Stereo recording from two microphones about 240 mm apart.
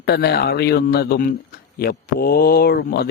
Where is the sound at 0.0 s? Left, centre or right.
Left.